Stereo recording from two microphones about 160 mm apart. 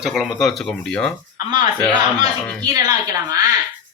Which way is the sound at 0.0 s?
5° right (ahead or behind).